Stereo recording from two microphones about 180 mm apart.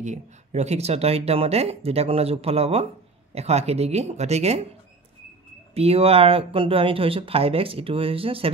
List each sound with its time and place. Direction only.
0.0 s speech: 40° right (ahead or behind)
5.8 s speech: 35° right (ahead or behind)